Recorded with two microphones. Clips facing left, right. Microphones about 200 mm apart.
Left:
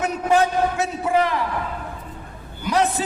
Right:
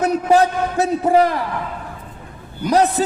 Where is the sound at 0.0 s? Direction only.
35° right (ahead or behind).